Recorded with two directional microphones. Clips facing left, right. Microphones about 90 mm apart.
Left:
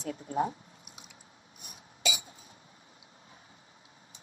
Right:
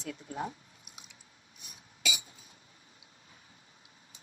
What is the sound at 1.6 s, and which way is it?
Cough, 50° left (ahead or behind).